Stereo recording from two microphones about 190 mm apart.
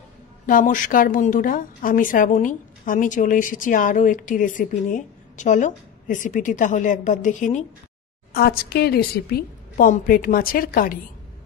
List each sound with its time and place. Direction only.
0.5 s a woman's voice: 45° left (ahead or behind)
8.3 s a woman's voice: 55° left (ahead or behind)